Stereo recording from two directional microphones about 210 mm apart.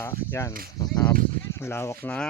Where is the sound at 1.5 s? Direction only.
10° left (ahead or behind).